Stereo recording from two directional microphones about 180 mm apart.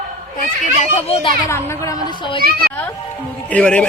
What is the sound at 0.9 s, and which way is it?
Speech, 35° left (ahead or behind).